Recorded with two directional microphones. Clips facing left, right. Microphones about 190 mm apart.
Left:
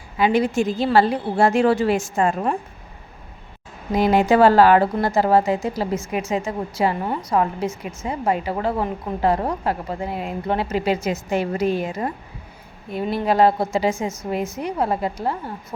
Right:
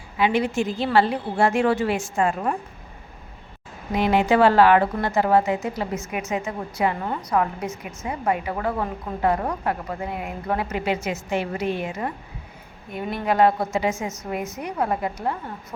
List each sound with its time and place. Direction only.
0.2 s a woman's voice: 40° left (ahead or behind)
3.9 s a woman's voice: 40° left (ahead or behind)